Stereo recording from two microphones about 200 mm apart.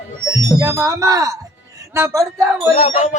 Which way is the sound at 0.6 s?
15° right (ahead or behind).